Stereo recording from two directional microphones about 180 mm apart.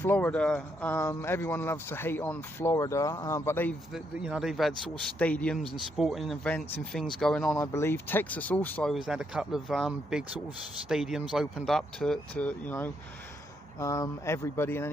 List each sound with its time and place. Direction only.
0.0 s speech: 10° left (ahead or behind)
3.9 s speech: 5° right (ahead or behind); by 14.8 s 15° left (ahead or behind)